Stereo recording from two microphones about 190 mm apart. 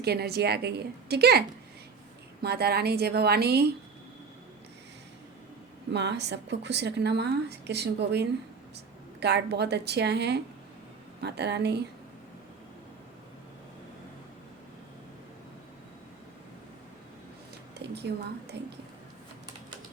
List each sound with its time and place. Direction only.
0.0 s speech: 55° right (ahead or behind)
5.9 s speech: 65° right (ahead or behind)
17.7 s a woman's voice: 60° right (ahead or behind)